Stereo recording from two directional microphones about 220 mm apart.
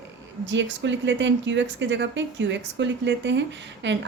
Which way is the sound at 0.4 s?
55° right (ahead or behind).